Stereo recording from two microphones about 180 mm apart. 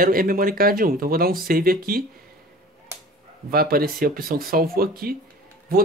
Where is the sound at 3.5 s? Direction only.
55° right (ahead or behind).